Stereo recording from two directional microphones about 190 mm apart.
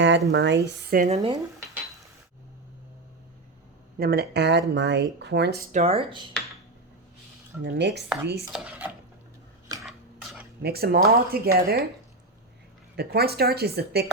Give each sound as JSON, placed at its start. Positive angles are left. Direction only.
{"t": 0.0, "sound": "speech", "side_deg": -70}
{"t": 0.9, "sound": "speech", "side_deg": -35}
{"t": 3.9, "sound": "speech", "side_deg": -55}
{"t": 5.7, "sound": "speech", "side_deg": -35}
{"t": 7.6, "sound": "speech", "side_deg": -65}
{"t": 8.5, "sound": "stir", "side_deg": -5}
{"t": 9.8, "sound": "cutlery", "side_deg": 0}
{"t": 10.6, "sound": "speech", "side_deg": -55}
{"t": 13.0, "sound": "speech", "side_deg": -55}